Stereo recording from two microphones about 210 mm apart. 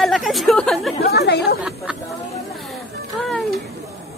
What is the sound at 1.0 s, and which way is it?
Chatter, 50° left (ahead or behind).